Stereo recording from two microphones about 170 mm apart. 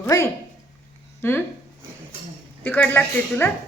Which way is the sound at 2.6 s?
10° left (ahead or behind).